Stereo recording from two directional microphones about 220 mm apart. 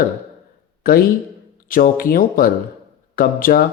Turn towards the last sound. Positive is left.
turn(degrees=40)  # may be behind; listen again after turning